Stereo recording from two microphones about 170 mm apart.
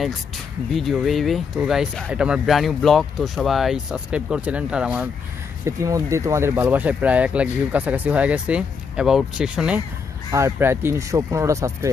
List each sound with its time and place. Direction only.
0.7 s speech: centre (ahead or behind)
5.7 s speech: 20° right (ahead or behind)
10.3 s speech: 15° right (ahead or behind)